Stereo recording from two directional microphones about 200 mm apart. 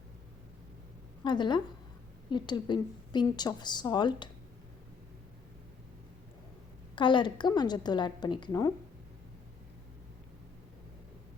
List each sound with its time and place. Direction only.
1.2 s a woman's voice: 20° left (ahead or behind)
6.9 s a woman's voice: 25° left (ahead or behind)